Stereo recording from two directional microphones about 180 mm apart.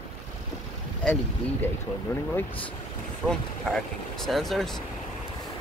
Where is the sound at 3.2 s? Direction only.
Centre (ahead or behind).